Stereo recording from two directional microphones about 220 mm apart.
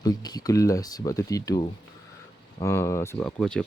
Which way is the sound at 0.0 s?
15° left (ahead or behind).